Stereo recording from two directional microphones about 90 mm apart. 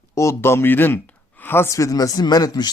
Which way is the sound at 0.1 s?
35° left (ahead or behind).